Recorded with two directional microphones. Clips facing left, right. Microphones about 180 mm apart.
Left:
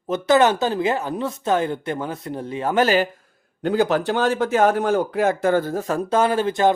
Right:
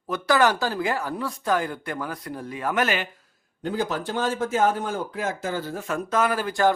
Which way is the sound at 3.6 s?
70° left (ahead or behind).